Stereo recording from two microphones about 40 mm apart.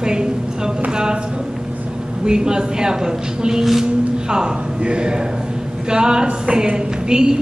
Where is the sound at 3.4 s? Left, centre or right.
Centre.